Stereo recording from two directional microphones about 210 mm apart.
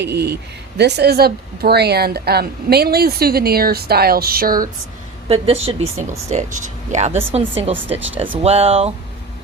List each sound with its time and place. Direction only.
0.0 s speech: 50° right (ahead or behind)
5.3 s speech: 30° right (ahead or behind)
7.1 s speech: 10° right (ahead or behind)
7.3 s speech: 25° right (ahead or behind)
7.9 s speech: 10° right (ahead or behind)
8.4 s speech: 30° right (ahead or behind)